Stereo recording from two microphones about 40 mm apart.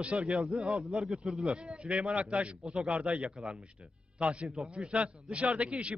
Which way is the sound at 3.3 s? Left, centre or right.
Centre.